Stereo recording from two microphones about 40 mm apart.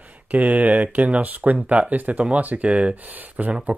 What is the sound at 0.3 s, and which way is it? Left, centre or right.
Speech, right.